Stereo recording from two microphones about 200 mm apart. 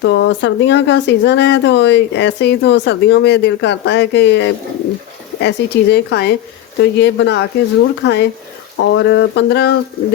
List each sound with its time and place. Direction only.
0.0 s speech: 65° left (ahead or behind)